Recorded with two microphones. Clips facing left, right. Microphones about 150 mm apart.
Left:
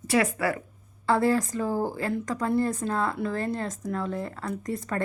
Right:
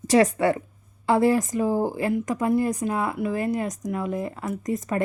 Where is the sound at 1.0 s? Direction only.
15° right (ahead or behind).